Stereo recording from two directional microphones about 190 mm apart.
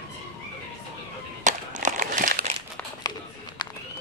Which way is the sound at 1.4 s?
40° right (ahead or behind).